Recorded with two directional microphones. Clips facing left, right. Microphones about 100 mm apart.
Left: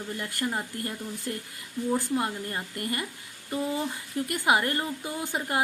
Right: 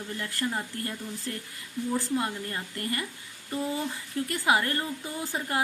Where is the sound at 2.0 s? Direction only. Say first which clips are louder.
Left 1 dB; 15° left (ahead or behind).